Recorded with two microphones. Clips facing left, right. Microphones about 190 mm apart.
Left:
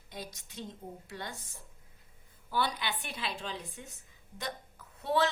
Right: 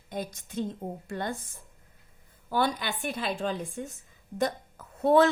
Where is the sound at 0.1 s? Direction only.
50° right (ahead or behind).